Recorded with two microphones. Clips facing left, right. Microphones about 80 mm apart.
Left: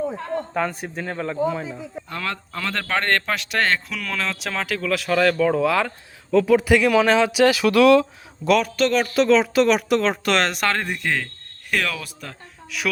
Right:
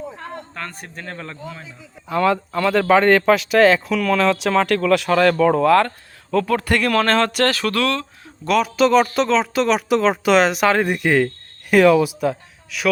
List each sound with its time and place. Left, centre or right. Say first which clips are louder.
0.5 s speech: left 8 dB; centre
2.0 s speech: right 13 dB; centre
8.4 s speech: right 2 dB; centre